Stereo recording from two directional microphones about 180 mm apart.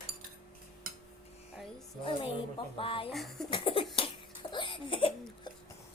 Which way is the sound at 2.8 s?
30° left (ahead or behind).